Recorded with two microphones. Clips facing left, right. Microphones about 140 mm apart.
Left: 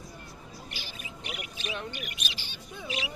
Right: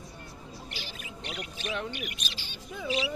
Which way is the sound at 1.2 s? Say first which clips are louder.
Right 2 dB; 10° left (ahead or behind).